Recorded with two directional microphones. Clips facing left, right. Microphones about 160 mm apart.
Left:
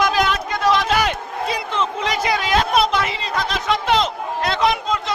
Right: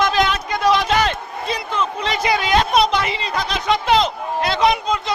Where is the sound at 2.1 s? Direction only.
Centre (ahead or behind).